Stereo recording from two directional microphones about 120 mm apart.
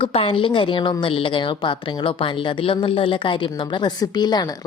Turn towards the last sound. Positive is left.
turn(degrees=35)  # may be behind; listen again after turning